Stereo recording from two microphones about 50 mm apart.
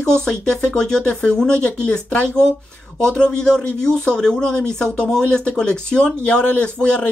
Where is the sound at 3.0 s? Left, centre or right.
Centre.